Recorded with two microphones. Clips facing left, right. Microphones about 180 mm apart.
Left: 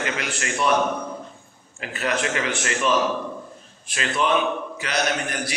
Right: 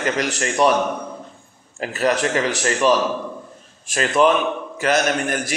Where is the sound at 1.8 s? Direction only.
40° right (ahead or behind).